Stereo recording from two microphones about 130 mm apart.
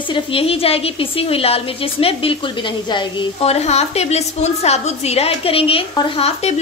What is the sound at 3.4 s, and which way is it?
A woman's voice, 55° left (ahead or behind).